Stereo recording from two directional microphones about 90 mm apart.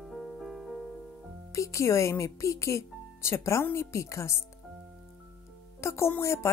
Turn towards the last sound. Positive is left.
turn(degrees=30)  # may be behind; listen again after turning